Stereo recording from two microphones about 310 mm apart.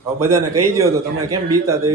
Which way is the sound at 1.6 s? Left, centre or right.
Centre.